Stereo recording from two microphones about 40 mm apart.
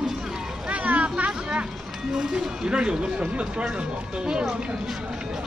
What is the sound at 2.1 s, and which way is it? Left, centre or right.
Speech, centre.